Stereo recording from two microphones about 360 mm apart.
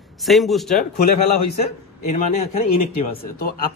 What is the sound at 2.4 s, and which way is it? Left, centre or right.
A man's voice, centre.